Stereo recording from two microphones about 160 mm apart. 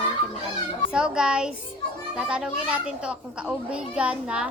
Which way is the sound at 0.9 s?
5° right (ahead or behind).